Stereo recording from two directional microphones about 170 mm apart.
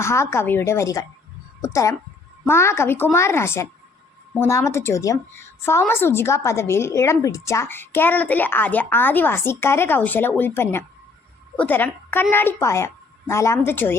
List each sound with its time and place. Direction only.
0.0 s a woman's voice: 15° left (ahead or behind)